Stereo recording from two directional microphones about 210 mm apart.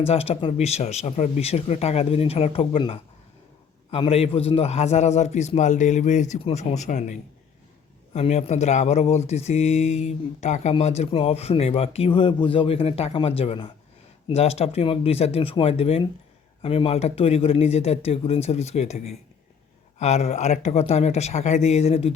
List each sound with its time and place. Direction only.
0.1 s a man's voice: 30° left (ahead or behind)